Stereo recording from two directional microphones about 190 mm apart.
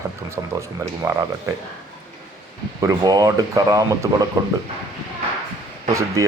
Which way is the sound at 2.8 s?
20° right (ahead or behind).